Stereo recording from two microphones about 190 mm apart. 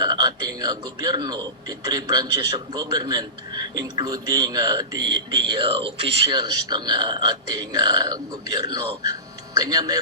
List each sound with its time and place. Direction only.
0.0 s a man's voice: 20° right (ahead or behind)